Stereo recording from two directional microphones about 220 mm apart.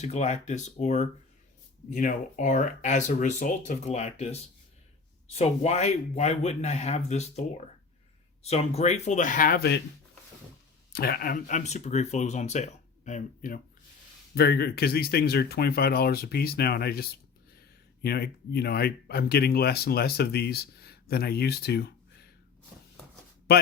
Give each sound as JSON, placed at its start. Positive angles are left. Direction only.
{"t": 0.0, "sound": "speech", "side_deg": 30}
{"t": 10.9, "sound": "speech", "side_deg": 45}
{"t": 14.3, "sound": "speech", "side_deg": 45}
{"t": 23.5, "sound": "speech", "side_deg": 50}